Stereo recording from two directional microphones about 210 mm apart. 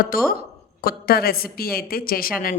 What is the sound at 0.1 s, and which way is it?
Speech, 45° left (ahead or behind).